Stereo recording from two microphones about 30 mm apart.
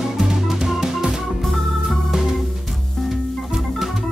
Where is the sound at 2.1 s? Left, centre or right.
Centre.